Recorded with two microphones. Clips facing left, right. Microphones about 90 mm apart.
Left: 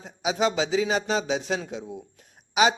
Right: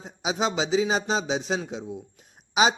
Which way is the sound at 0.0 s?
20° right (ahead or behind).